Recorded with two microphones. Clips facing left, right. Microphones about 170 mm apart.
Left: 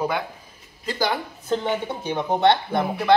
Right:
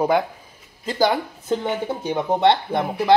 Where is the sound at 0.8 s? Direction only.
25° right (ahead or behind).